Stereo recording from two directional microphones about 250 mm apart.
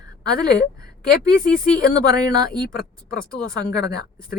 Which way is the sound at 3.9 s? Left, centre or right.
Left.